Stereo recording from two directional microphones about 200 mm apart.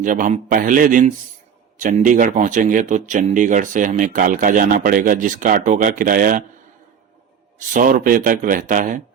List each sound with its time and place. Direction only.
0.0 s speech: 40° right (ahead or behind)
7.7 s speech: 40° right (ahead or behind)